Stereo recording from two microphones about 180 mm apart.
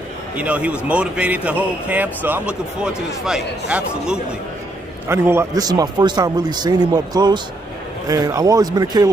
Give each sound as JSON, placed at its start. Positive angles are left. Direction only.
{"t": 0.4, "sound": "a man's voice", "side_deg": -5}